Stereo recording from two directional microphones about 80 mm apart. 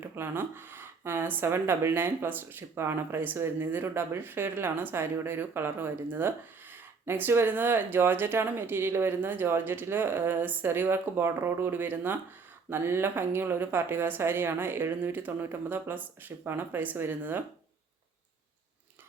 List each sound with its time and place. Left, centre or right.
0.0 s speech: right